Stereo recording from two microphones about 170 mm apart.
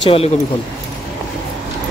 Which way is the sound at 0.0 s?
35° left (ahead or behind).